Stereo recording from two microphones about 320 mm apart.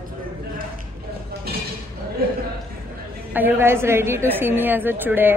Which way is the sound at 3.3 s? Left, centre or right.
Centre.